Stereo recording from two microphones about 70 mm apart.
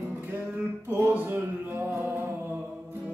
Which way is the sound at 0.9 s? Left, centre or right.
Right.